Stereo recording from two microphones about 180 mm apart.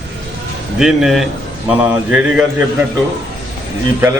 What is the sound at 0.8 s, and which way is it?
A man's voice, centre (ahead or behind).